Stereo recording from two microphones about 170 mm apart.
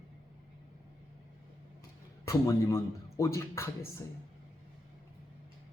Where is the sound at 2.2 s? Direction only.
15° left (ahead or behind).